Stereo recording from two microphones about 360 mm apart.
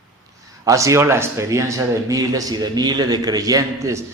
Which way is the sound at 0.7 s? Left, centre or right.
Centre.